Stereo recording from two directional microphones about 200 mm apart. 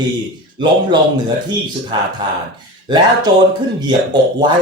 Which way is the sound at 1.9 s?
25° right (ahead or behind).